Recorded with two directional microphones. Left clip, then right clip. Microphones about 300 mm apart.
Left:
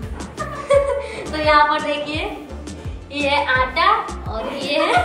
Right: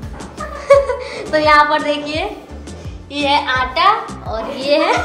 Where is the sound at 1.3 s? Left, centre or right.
Centre.